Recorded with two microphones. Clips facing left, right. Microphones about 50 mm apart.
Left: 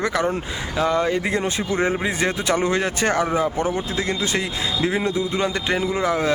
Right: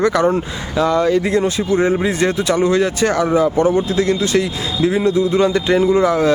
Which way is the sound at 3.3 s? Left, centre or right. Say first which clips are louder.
Right 8 dB; centre.